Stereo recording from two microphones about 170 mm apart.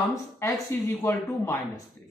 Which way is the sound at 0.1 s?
20° left (ahead or behind).